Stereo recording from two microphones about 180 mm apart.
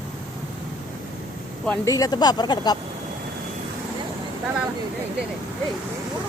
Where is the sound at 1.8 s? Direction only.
20° left (ahead or behind).